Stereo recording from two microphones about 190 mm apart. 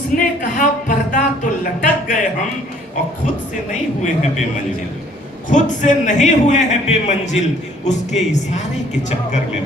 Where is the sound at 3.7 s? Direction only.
40° left (ahead or behind).